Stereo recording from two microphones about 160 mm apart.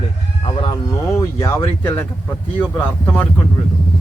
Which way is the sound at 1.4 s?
15° left (ahead or behind).